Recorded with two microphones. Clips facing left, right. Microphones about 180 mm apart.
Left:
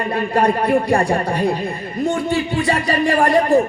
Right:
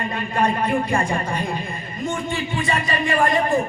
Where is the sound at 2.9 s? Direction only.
40° left (ahead or behind).